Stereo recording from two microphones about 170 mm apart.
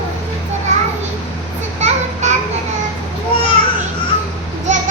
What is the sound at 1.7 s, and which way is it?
Children playing, 45° right (ahead or behind).